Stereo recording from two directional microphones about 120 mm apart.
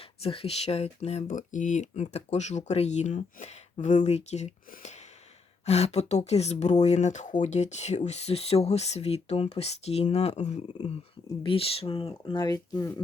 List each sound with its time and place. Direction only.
0.2 s speech: 55° left (ahead or behind); by 10.6 s 70° left (ahead or behind)
11.4 s speech: 50° left (ahead or behind); by 12.9 s 30° left (ahead or behind)